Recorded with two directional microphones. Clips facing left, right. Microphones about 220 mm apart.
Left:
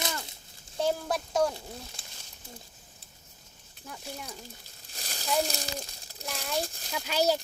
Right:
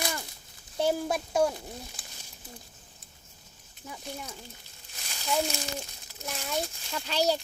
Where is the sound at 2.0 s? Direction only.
25° left (ahead or behind).